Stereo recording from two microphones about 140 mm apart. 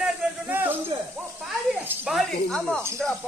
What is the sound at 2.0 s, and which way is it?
Snake, centre (ahead or behind).